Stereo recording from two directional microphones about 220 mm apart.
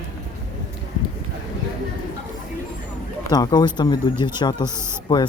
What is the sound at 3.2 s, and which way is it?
Speech, 15° left (ahead or behind).